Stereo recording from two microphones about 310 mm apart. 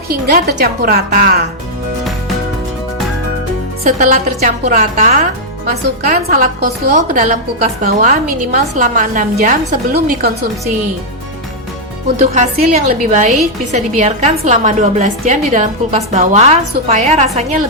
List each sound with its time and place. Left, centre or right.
0.1 s a woman's voice: right
3.8 s a woman's voice: right
12.3 s a woman's voice: right